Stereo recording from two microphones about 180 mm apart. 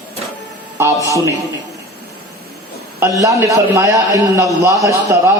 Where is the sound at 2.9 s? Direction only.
20° right (ahead or behind).